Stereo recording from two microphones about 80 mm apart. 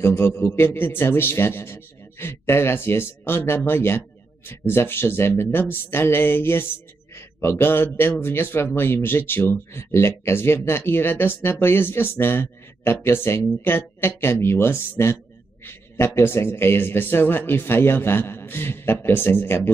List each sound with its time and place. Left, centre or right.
0.0 s speech: left